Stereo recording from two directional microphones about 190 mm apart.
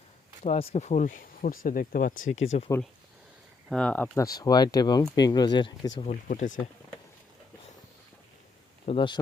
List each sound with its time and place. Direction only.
0.4 s speech: 35° left (ahead or behind)
2.5 s speech: 30° left (ahead or behind)
3.7 s speech: 5° left (ahead or behind); by 5.9 s 25° left (ahead or behind)
6.0 s speech: 40° left (ahead or behind)
8.9 s speech: 25° left (ahead or behind)